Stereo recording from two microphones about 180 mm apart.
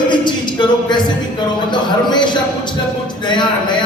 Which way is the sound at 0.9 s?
25° left (ahead or behind).